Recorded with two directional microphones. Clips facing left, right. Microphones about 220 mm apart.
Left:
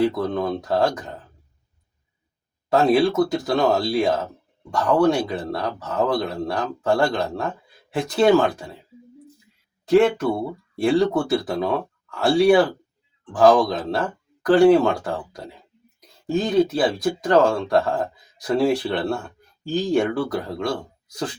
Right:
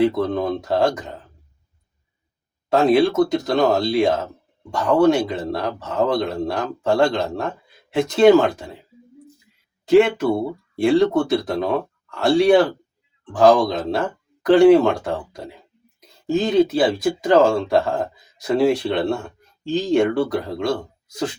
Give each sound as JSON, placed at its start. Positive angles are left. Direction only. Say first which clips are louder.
{"t": 0.0, "sound": "speech", "louder": "right 2 dB", "side_deg": 0}
{"t": 2.6, "sound": "speech", "louder": "right 2 dB", "side_deg": 0}
{"t": 9.9, "sound": "speech", "louder": "right 2 dB", "side_deg": 0}
{"t": 16.4, "sound": "speech", "louder": "right 2 dB", "side_deg": 0}